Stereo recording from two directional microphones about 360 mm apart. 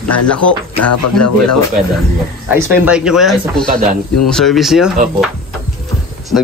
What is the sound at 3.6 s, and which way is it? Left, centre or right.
Speech, right.